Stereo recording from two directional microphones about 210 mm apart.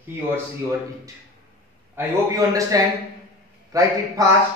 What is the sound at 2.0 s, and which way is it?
A man's voice, 15° right (ahead or behind).